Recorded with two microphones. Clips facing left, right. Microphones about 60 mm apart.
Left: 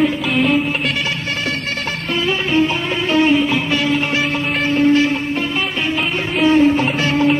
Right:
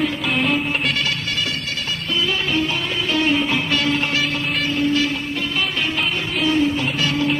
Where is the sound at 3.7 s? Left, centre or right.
Centre.